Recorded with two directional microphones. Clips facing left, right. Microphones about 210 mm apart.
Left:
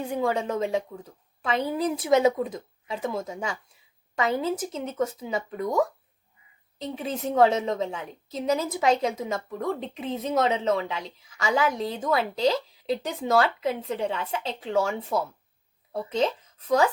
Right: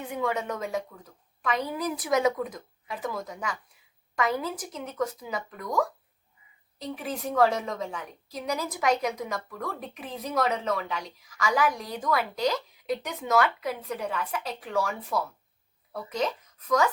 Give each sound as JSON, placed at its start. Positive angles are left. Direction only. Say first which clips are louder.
{"t": 0.0, "sound": "a woman's voice", "louder": "left 4 dB", "side_deg": 30}